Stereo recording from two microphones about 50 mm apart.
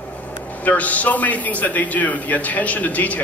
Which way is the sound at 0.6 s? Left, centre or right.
Left.